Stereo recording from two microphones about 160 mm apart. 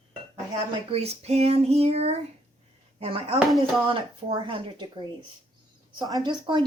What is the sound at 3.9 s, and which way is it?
Speech, 30° right (ahead or behind).